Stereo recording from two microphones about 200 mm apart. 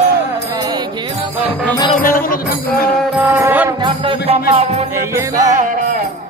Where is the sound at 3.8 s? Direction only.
30° right (ahead or behind).